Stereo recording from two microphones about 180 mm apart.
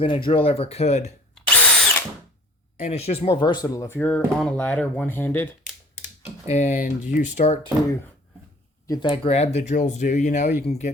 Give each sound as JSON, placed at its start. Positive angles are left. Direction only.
{"t": 0.3, "sound": "speech", "side_deg": 30}
{"t": 1.4, "sound": "drill", "side_deg": 5}
{"t": 2.7, "sound": "speech", "side_deg": 35}
{"t": 6.5, "sound": "speech", "side_deg": 40}
{"t": 8.9, "sound": "speech", "side_deg": 25}